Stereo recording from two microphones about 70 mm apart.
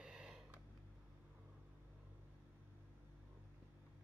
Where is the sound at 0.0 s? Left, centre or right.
Centre.